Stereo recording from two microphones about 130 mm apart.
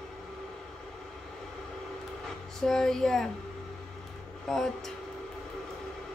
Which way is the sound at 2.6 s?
5° left (ahead or behind).